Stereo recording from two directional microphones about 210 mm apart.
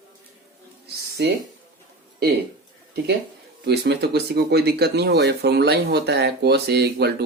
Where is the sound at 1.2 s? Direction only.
50° right (ahead or behind).